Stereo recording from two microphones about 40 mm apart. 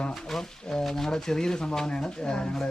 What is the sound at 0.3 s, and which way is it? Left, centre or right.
Speech, centre.